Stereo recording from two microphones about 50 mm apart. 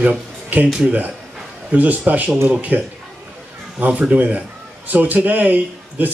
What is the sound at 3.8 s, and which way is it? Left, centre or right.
Speech, right.